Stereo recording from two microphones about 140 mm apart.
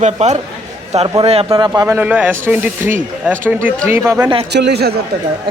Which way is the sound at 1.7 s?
20° right (ahead or behind).